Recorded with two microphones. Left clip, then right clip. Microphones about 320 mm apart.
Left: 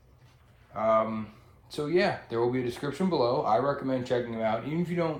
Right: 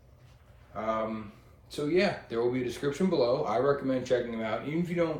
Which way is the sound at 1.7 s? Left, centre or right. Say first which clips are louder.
Left 1 dB; centre.